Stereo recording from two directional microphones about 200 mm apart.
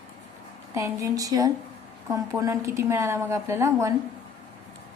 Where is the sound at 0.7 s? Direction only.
15° right (ahead or behind).